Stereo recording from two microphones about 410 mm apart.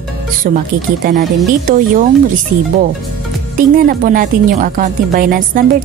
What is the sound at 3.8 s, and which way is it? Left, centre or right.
A woman's voice, centre.